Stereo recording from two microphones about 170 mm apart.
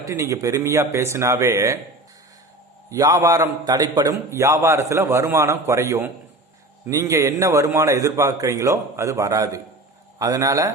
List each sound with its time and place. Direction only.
0.0 s a man's voice: 15° right (ahead or behind)
2.9 s a man's voice: 20° right (ahead or behind)